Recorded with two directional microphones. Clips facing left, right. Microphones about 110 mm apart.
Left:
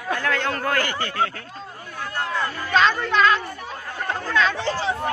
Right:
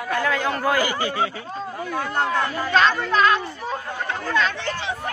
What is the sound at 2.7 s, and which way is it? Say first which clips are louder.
Speech: even; centre (ahead or behind).